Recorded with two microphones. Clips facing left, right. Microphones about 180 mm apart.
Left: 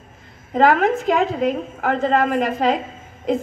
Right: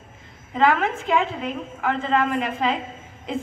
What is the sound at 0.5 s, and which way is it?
A woman's voice, 45° left (ahead or behind).